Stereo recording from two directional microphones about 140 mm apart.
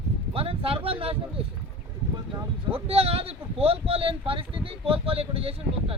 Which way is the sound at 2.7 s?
45° right (ahead or behind).